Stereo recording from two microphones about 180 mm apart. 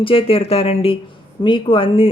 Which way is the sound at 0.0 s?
30° left (ahead or behind).